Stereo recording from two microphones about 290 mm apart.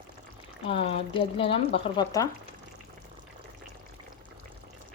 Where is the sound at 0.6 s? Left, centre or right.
Centre.